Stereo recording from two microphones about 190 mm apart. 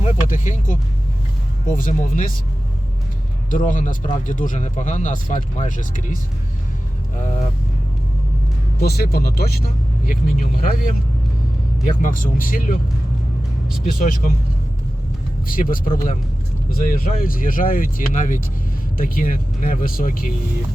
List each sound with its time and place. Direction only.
0.0 s speech: 40° left (ahead or behind)
3.5 s speech: 45° left (ahead or behind)
8.8 s speech: 55° left (ahead or behind)
12.0 s speech: 45° left (ahead or behind)
13.8 s speech: 50° left (ahead or behind)
15.4 s speech: 45° left (ahead or behind)
16.9 s speech: 50° left (ahead or behind)